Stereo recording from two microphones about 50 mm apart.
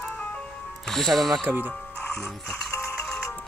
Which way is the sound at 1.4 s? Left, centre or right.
Right.